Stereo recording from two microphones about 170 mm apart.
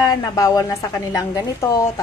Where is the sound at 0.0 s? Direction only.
20° left (ahead or behind).